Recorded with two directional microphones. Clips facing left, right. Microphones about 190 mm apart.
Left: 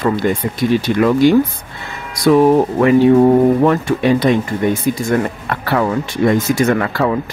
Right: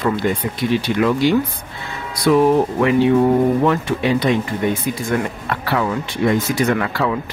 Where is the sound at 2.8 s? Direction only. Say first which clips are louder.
Left 6 dB; 40° left (ahead or behind).